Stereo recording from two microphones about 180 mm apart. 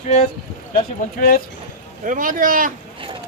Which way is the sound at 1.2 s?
55° left (ahead or behind).